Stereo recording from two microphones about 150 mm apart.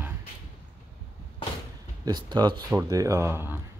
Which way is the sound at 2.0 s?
30° right (ahead or behind).